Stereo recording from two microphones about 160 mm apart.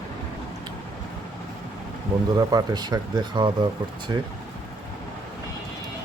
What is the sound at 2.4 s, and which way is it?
Speech, 25° right (ahead or behind).